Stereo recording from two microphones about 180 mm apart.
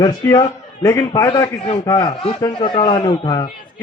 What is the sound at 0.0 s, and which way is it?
A man's voice, 20° left (ahead or behind).